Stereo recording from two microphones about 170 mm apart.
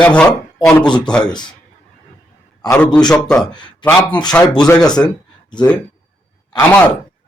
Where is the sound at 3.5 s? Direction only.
25° left (ahead or behind).